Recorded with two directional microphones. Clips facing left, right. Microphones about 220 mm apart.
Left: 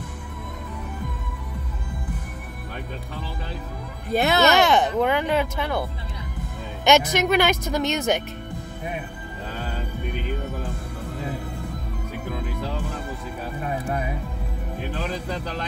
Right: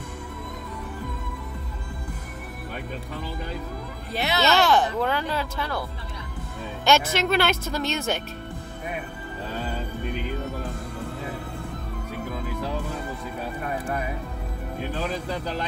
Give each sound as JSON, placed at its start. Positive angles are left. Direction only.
{"t": 4.1, "sound": "speech", "side_deg": 50}
{"t": 4.5, "sound": "speech", "side_deg": 20}